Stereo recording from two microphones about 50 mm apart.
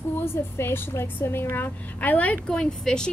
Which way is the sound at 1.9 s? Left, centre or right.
Left.